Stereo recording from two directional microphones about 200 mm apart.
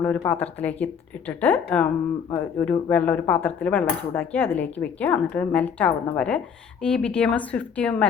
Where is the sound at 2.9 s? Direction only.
10° left (ahead or behind).